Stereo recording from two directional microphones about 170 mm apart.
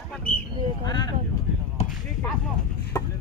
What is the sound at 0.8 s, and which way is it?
Vehicle, 25° left (ahead or behind).